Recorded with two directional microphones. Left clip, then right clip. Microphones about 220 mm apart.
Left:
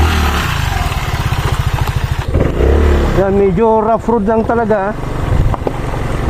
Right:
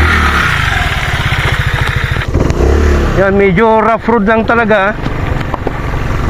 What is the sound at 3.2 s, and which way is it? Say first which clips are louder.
Speech: right 3 dB; 20° right (ahead or behind).